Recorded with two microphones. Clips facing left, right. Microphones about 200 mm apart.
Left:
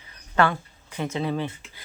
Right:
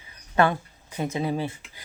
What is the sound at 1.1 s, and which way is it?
Speech, 10° right (ahead or behind).